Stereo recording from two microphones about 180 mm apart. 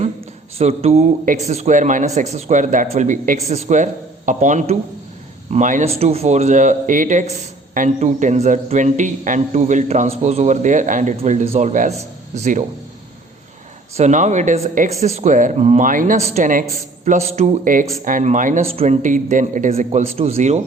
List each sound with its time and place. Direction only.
0.6 s speech: 35° right (ahead or behind)
13.9 s speech: 40° right (ahead or behind)
18.6 s speech: 35° right (ahead or behind)